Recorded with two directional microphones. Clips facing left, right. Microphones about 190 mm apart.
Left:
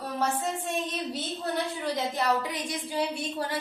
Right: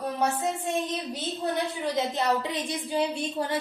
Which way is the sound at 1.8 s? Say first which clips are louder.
Right 2 dB; 20° right (ahead or behind).